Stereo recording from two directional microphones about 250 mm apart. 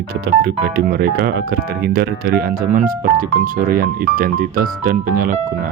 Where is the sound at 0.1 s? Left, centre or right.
Right.